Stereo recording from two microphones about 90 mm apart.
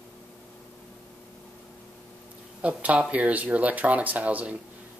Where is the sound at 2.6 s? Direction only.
15° right (ahead or behind).